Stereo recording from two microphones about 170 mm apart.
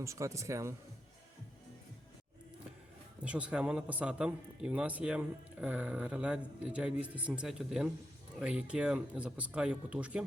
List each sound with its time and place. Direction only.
0.0 s speech: 15° right (ahead or behind)
3.2 s a man's voice: 5° right (ahead or behind)